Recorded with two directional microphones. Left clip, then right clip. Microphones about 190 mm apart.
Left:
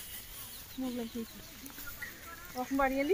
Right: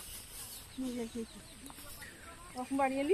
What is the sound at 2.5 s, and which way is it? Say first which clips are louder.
Speech: left 2 dB; 5° right (ahead or behind).